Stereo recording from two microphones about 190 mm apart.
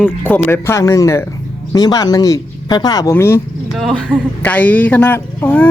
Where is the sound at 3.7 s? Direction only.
Centre (ahead or behind).